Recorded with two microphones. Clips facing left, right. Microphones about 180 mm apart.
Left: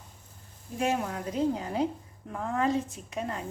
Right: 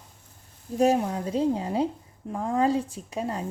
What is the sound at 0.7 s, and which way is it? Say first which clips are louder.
A woman's voice: right 7 dB; 35° right (ahead or behind).